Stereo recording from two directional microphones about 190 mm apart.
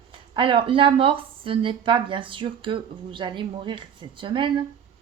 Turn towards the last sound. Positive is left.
turn(degrees=-25)  # may be behind; listen again after turning